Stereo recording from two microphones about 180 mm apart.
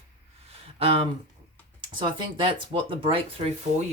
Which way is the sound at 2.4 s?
30° right (ahead or behind).